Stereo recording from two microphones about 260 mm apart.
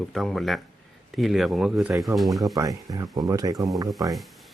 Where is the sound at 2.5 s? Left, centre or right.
Centre.